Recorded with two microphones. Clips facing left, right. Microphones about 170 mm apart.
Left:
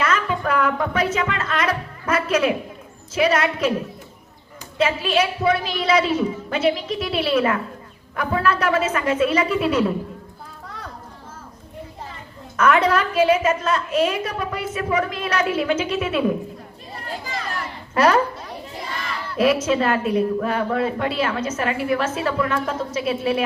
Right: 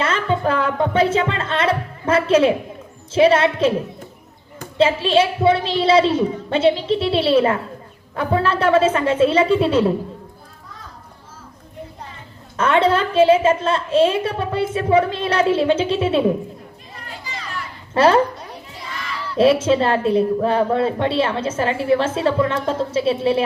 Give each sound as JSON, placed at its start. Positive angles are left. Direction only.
{"t": 0.0, "sound": "a sound", "side_deg": -30}
{"t": 3.2, "sound": "a woman's voice", "side_deg": -30}
{"t": 4.8, "sound": "a woman's voice", "side_deg": -30}
{"t": 12.5, "sound": "a woman's voice", "side_deg": -30}
{"t": 17.9, "sound": "a woman's voice", "side_deg": -30}
{"t": 19.4, "sound": "a woman's voice", "side_deg": -30}